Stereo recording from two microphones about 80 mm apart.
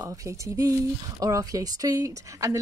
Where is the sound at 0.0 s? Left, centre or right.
Right.